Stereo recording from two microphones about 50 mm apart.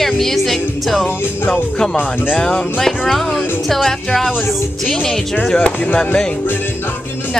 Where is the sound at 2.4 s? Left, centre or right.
Left.